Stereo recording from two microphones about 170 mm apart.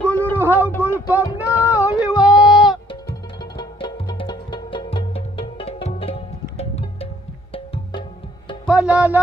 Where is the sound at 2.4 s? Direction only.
Centre (ahead or behind).